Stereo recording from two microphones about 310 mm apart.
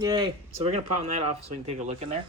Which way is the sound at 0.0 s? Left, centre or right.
Centre.